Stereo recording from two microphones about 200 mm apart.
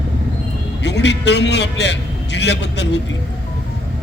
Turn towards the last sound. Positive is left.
turn(degrees=60)  # may be behind; listen again after turning